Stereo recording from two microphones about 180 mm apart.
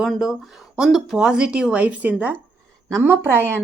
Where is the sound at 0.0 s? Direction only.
Centre (ahead or behind).